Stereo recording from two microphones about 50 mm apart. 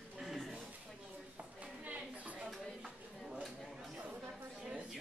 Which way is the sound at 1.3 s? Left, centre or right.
Right.